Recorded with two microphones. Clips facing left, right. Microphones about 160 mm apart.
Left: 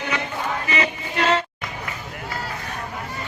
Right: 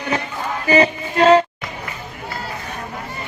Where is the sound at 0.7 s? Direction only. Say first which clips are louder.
Right 9 dB; 35° right (ahead or behind).